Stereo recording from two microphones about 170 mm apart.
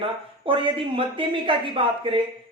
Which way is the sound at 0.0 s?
30° right (ahead or behind).